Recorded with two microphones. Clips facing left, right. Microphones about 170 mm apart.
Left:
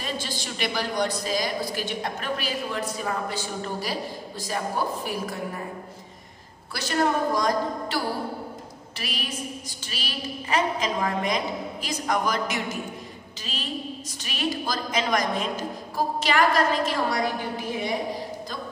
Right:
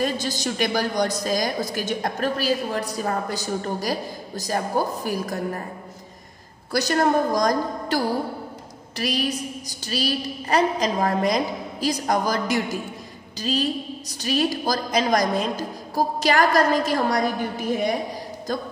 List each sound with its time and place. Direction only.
0.0 s a woman's voice: 40° right (ahead or behind)
6.7 s a woman's voice: 40° right (ahead or behind)